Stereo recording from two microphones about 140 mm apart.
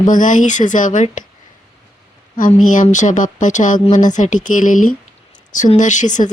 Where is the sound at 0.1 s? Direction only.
65° left (ahead or behind).